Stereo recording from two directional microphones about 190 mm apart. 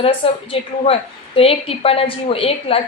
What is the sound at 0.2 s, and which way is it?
A woman's voice, 30° left (ahead or behind).